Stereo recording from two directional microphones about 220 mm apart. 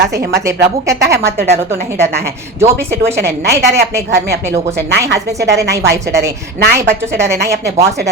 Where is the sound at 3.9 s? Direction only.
10° right (ahead or behind).